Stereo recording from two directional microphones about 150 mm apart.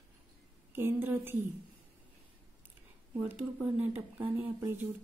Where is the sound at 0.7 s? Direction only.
15° right (ahead or behind).